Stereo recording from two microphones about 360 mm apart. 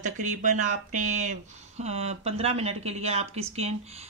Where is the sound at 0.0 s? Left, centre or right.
Right.